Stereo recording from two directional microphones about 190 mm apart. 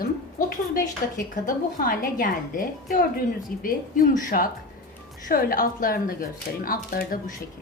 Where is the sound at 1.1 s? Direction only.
45° left (ahead or behind).